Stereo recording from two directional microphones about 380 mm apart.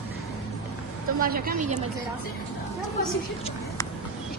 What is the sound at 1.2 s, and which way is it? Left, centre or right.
Speech, right.